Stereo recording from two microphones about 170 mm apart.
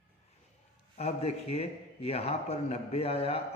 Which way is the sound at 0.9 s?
40° left (ahead or behind).